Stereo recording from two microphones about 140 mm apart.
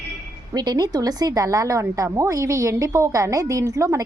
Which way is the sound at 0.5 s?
30° right (ahead or behind).